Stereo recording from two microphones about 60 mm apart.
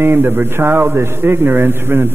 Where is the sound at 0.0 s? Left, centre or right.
Right.